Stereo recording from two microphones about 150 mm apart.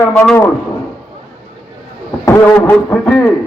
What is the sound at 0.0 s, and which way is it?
Speech, 10° left (ahead or behind).